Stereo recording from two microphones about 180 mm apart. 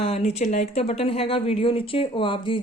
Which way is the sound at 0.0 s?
35° left (ahead or behind).